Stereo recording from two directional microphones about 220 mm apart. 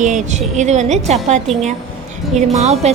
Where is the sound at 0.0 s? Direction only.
35° right (ahead or behind).